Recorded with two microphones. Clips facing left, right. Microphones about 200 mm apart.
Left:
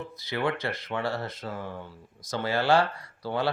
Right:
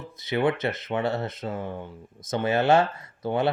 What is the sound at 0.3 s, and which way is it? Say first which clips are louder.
Speech: right 5 dB; 20° right (ahead or behind).